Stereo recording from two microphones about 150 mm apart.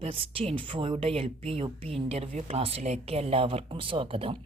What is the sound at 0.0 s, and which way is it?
A woman's voice, 40° right (ahead or behind).